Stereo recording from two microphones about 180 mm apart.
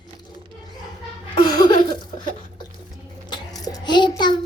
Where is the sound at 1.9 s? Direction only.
25° left (ahead or behind).